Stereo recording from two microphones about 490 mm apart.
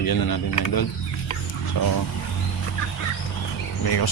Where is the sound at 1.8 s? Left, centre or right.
Left.